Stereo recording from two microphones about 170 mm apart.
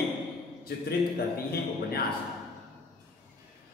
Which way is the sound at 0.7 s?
65° left (ahead or behind).